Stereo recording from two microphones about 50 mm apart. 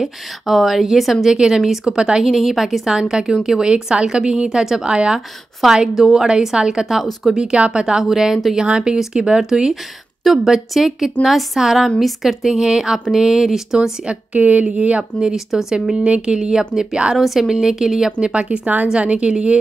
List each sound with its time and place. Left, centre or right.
0.0 s a woman's voice: centre
1.9 s a woman's voice: centre
2.2 s a woman's voice: centre
5.6 s a woman's voice: centre
8.5 s a woman's voice: centre
13.7 s speech: centre
15.1 s a woman's voice: centre
17.2 s a woman's voice: centre
18.2 s speech: right